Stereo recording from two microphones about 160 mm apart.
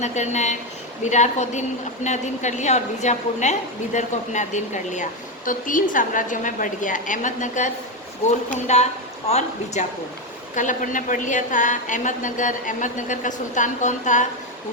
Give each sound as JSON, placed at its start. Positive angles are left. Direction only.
{"t": 0.0, "sound": "a woman's voice", "side_deg": 45}